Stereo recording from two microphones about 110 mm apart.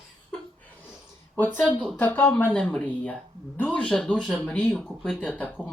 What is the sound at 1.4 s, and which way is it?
Speech, 15° left (ahead or behind).